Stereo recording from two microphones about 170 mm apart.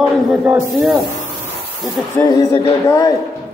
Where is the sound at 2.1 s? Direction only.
20° left (ahead or behind).